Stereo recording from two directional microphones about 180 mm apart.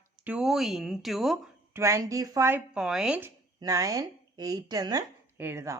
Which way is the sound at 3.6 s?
20° right (ahead or behind).